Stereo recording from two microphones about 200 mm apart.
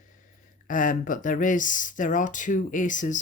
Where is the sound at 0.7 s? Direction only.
40° left (ahead or behind).